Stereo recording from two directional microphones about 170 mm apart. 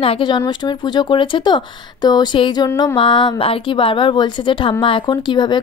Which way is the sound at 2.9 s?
30° left (ahead or behind).